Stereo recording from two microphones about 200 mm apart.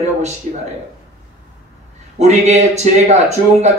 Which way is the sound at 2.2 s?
35° right (ahead or behind).